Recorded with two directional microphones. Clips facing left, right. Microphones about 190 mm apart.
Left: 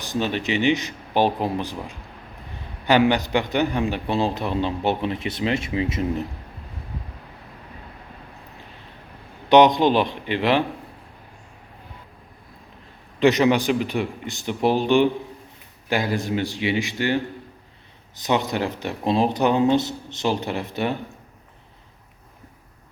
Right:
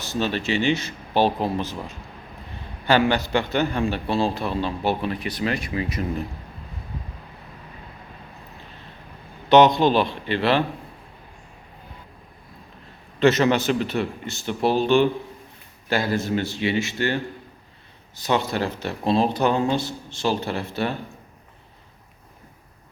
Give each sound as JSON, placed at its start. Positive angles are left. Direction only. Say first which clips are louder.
{"t": 0.0, "sound": "speech", "louder": "even", "side_deg": 15}
{"t": 9.5, "sound": "speech", "louder": "even", "side_deg": 15}
{"t": 13.1, "sound": "speech", "louder": "left 1 dB", "side_deg": 15}